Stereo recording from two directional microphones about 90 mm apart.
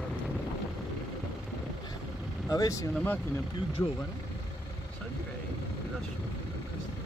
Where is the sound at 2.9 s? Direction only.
20° left (ahead or behind).